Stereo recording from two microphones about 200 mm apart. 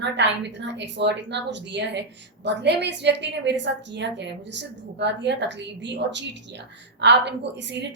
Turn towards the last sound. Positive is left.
turn(degrees=-60)  # may be behind; listen again after turning